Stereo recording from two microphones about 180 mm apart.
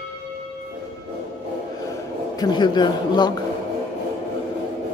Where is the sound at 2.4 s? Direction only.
25° left (ahead or behind).